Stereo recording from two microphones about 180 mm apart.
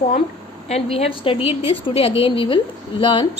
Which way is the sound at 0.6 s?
35° left (ahead or behind).